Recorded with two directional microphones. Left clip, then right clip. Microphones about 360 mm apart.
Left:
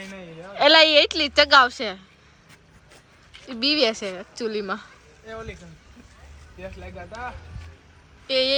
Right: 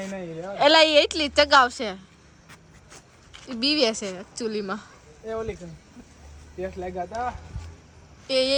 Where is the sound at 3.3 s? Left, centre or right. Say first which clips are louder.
Left 2 dB; centre.